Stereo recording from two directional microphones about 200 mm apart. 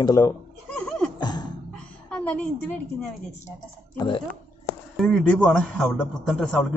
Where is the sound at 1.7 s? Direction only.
5° left (ahead or behind).